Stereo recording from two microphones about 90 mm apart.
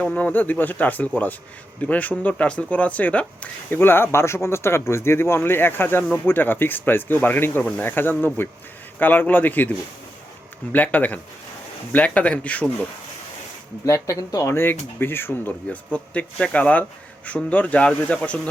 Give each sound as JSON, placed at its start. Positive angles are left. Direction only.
{"t": 0.0, "sound": "speech", "side_deg": 15}
{"t": 13.8, "sound": "speech", "side_deg": 35}